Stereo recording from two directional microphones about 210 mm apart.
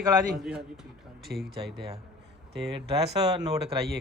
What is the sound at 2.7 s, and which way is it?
Speech, 30° right (ahead or behind).